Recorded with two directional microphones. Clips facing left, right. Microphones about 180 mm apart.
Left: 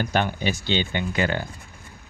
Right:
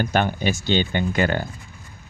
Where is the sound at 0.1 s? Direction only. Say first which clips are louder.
Right 2 dB; 50° right (ahead or behind).